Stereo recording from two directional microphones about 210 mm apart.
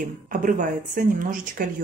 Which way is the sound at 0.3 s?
40° right (ahead or behind).